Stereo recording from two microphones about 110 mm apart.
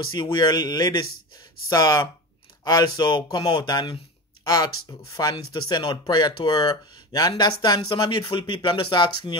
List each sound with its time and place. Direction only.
0.2 s speech: 45° left (ahead or behind)
5.1 s speech: 45° left (ahead or behind)